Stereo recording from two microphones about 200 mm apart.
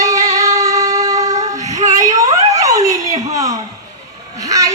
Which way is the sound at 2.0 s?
15° right (ahead or behind).